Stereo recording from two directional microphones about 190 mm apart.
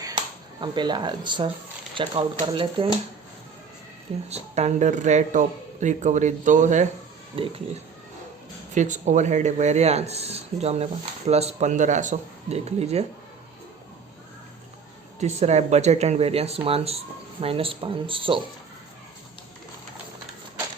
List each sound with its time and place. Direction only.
0.0 s a sound: 20° right (ahead or behind)
2.0 s speech: 25° right (ahead or behind)
4.3 s a man's voice: 35° right (ahead or behind)
7.3 s speech: 30° right (ahead or behind)
8.7 s a man's voice: 40° right (ahead or behind)
15.2 s a man's voice: 35° right (ahead or behind)